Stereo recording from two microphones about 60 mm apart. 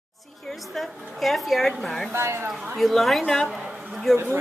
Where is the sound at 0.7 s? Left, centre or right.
Centre.